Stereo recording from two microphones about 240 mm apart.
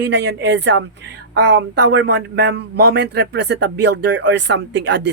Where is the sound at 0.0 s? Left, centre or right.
Right.